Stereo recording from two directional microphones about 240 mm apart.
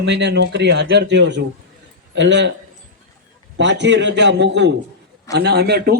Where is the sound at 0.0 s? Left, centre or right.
Right.